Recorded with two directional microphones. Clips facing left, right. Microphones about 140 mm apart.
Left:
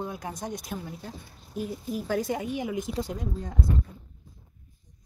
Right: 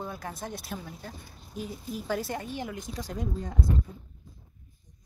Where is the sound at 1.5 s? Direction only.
50° left (ahead or behind).